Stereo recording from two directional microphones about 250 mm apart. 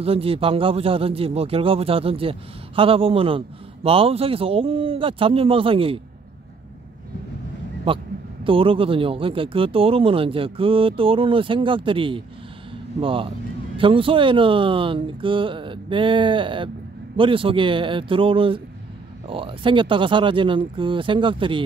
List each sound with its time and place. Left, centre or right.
0.0 s a man's voice: right
7.9 s a man's voice: right